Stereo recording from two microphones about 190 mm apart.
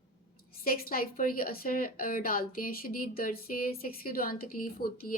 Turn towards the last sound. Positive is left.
turn(degrees=50)  # may be behind; listen again after turning